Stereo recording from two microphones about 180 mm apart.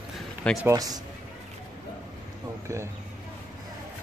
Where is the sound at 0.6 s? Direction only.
20° right (ahead or behind).